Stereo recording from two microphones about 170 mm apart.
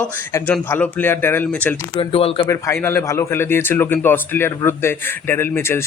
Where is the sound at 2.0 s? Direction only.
35° left (ahead or behind).